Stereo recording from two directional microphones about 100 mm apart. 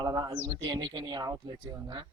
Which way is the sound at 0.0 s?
40° right (ahead or behind).